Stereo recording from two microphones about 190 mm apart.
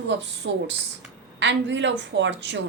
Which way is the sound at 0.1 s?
70° right (ahead or behind).